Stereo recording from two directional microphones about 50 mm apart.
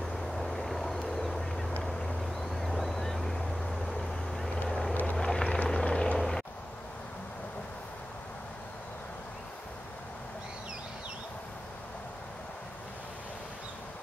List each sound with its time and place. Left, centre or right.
0.1 s vehicle: centre
1.0 s duck: centre
2.5 s boat: centre
4.6 s vehicle: centre
6.1 s a sound: centre